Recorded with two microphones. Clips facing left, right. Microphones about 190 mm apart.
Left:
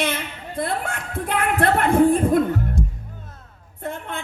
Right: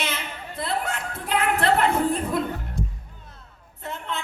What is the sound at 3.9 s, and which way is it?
Music, 50° left (ahead or behind).